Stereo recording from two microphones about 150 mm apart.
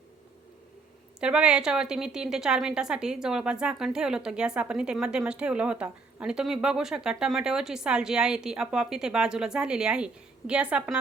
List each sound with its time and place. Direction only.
1.2 s a woman's voice: 5° right (ahead or behind)